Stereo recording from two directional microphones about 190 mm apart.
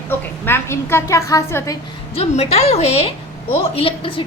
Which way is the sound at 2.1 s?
30° left (ahead or behind).